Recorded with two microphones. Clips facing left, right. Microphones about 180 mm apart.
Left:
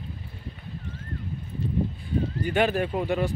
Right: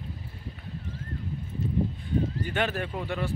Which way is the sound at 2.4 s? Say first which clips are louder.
Left 6 dB; 15° left (ahead or behind).